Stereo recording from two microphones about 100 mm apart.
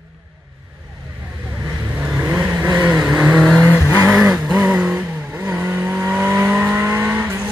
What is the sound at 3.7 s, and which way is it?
Vehicle, 25° left (ahead or behind).